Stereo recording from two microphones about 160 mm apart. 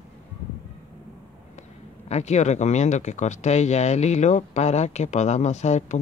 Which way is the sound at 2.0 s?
45° left (ahead or behind).